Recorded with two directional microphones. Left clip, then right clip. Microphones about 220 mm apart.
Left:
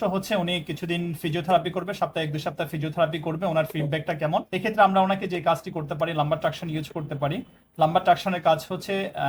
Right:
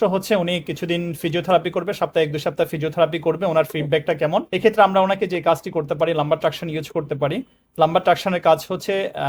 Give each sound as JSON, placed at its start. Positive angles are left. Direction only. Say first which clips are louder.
{"t": 0.0, "sound": "speech", "louder": "right 7 dB", "side_deg": -55}